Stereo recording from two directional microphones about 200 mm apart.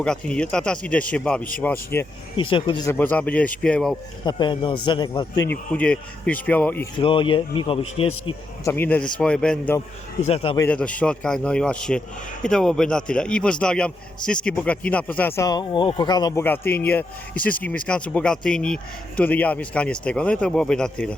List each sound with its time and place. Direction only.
0.0 s a man's voice: 5° left (ahead or behind)
2.3 s speech: 25° left (ahead or behind); by 3.9 s 5° left (ahead or behind)
4.3 s speech: 20° left (ahead or behind)
5.5 s speech: 5° left (ahead or behind)
6.9 s speech: 25° left (ahead or behind)
8.6 s a man's voice: 10° left (ahead or behind)
10.2 s speech: 30° left (ahead or behind)
10.6 s a man's voice: 5° left (ahead or behind)
16.4 s speech: 10° left (ahead or behind)